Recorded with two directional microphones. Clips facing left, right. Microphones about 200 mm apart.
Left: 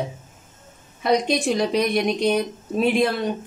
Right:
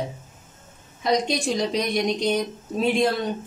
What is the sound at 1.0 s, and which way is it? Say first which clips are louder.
A woman's voice: left 3 dB; 60° left (ahead or behind).